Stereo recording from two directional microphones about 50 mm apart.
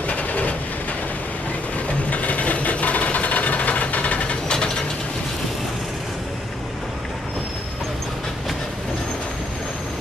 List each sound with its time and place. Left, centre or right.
0.0 s vehicle: left
2.0 s sewing machine: left